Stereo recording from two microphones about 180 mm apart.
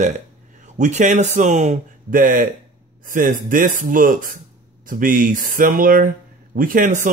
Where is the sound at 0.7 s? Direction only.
45° right (ahead or behind).